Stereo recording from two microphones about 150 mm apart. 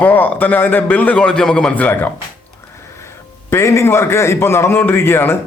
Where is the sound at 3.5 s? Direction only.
20° left (ahead or behind).